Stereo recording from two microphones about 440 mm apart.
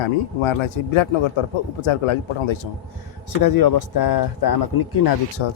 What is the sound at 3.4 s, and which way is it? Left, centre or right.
A man's voice, left.